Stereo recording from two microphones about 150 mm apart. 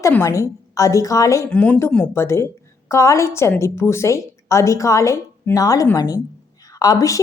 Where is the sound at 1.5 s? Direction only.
10° left (ahead or behind).